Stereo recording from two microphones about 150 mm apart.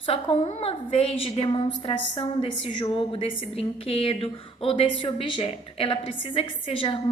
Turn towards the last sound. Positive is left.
turn(degrees=35)  # may be behind; listen again after turning